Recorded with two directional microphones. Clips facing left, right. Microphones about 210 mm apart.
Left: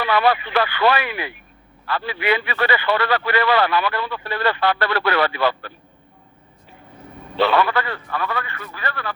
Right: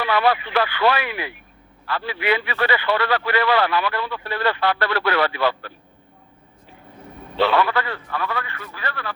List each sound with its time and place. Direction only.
0.0 s speech: 55° left (ahead or behind)
7.4 s speech: 55° left (ahead or behind)